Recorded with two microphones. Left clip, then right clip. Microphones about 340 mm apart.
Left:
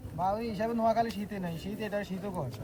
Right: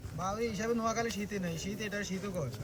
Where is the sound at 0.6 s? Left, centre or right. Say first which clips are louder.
Left 7 dB; centre.